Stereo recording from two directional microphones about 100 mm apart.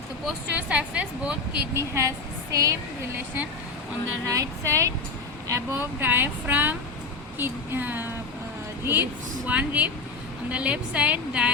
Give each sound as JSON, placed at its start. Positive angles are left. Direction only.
{"t": 0.5, "sound": "a woman's voice", "side_deg": -15}
{"t": 1.7, "sound": "a woman's voice", "side_deg": -30}
{"t": 4.3, "sound": "a woman's voice", "side_deg": -35}